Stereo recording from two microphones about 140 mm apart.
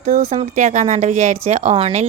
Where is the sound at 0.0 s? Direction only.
50° right (ahead or behind).